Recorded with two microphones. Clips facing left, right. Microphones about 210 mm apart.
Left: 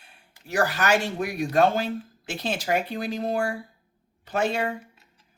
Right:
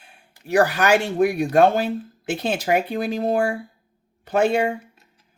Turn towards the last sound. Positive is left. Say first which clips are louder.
# right 7 dB
turn(degrees=-60)  # may be behind; listen again after turning